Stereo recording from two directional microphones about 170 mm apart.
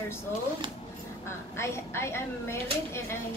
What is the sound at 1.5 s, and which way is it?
A woman's voice, 15° left (ahead or behind).